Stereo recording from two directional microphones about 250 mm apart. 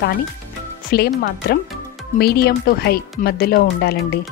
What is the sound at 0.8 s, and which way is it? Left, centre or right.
Speech, left.